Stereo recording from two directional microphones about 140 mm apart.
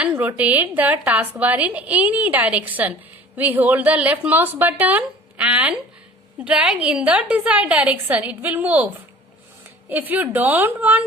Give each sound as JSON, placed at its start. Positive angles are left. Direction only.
{"t": 0.0, "sound": "a woman's voice", "side_deg": -10}
{"t": 9.9, "sound": "a woman's voice", "side_deg": -15}